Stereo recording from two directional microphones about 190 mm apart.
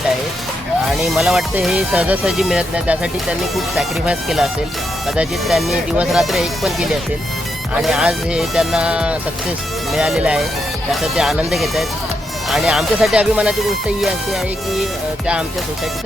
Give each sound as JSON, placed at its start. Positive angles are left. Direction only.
{"t": 1.0, "sound": "speech", "side_deg": 0}